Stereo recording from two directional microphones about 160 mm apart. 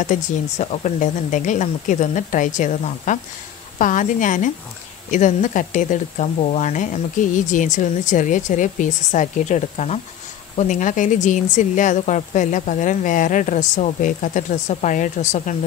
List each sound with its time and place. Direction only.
0.0 s speech: 50° left (ahead or behind)